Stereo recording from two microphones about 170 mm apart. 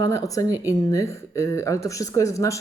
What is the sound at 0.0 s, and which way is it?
Speech, 20° left (ahead or behind).